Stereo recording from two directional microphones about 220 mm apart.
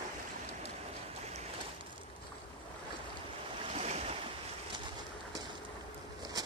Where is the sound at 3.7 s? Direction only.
30° right (ahead or behind).